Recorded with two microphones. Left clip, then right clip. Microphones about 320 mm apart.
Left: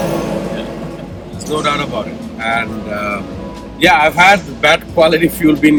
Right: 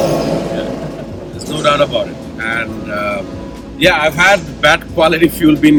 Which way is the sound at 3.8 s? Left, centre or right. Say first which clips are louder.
Left 2 dB; centre.